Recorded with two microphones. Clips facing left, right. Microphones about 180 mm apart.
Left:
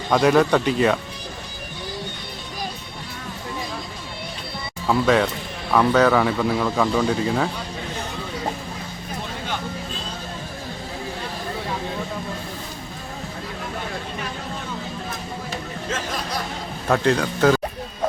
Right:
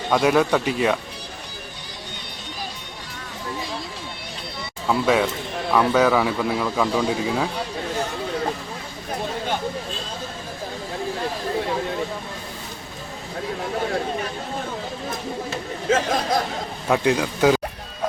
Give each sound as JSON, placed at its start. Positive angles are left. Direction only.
{"t": 0.1, "sound": "speech", "side_deg": -5}
{"t": 4.9, "sound": "speech", "side_deg": -5}
{"t": 15.9, "sound": "a sound", "side_deg": -50}
{"t": 16.9, "sound": "speech", "side_deg": -10}